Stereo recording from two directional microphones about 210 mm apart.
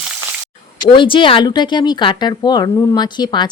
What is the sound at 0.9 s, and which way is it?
Speech, 25° left (ahead or behind).